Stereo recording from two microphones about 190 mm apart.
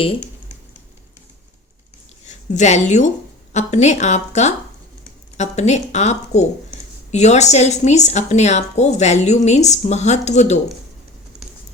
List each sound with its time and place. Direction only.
2.2 s a woman's voice: 40° left (ahead or behind)